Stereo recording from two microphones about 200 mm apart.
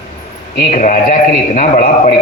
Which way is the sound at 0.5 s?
40° left (ahead or behind).